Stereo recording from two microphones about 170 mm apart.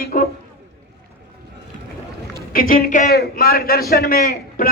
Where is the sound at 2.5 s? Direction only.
55° left (ahead or behind).